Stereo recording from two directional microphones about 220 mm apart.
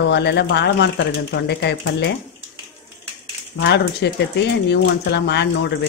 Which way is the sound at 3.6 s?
50° left (ahead or behind).